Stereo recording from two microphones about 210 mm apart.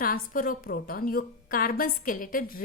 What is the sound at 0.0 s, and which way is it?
A woman's voice, 45° left (ahead or behind).